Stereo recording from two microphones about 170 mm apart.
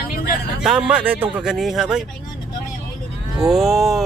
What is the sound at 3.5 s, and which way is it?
Speech, centre (ahead or behind).